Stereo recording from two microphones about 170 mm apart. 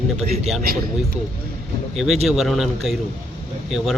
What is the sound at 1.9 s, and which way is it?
Speech, centre (ahead or behind).